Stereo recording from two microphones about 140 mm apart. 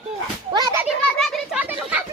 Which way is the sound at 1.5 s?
10° right (ahead or behind).